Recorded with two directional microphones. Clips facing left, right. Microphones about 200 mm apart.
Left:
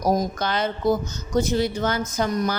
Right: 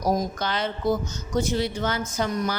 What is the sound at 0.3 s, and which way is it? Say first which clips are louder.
A woman's voice: left 3 dB; 45° left (ahead or behind).